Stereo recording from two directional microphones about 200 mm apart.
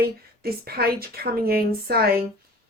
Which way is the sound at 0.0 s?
50° right (ahead or behind).